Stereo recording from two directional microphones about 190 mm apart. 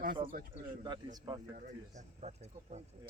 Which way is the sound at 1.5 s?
40° right (ahead or behind).